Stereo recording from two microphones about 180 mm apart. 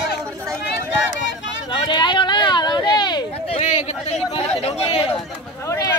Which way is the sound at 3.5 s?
40° left (ahead or behind).